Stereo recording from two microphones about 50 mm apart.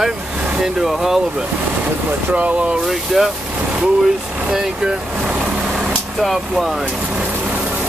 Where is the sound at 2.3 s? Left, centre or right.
Right.